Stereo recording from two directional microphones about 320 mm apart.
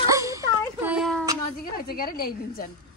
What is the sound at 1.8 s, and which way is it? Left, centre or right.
Speech, left.